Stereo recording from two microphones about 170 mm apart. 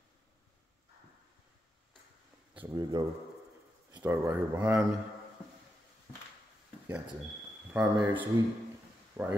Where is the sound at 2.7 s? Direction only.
25° right (ahead or behind).